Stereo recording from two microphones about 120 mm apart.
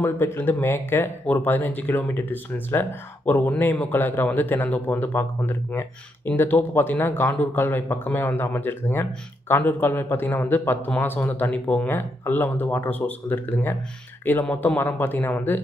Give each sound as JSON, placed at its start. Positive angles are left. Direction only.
{"t": 0.0, "sound": "a man's voice", "side_deg": 20}